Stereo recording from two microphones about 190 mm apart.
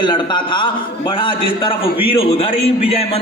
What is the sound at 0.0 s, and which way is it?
A man's voice, 25° left (ahead or behind).